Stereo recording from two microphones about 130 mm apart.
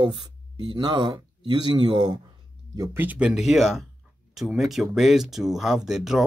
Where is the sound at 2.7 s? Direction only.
25° right (ahead or behind).